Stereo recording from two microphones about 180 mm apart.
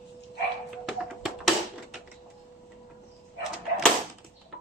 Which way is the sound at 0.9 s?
5° right (ahead or behind).